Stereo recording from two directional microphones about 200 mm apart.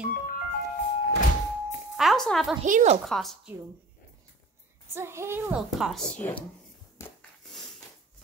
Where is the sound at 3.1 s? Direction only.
Centre (ahead or behind).